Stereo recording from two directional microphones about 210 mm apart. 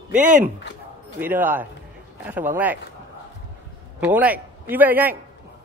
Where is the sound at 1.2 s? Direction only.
10° right (ahead or behind).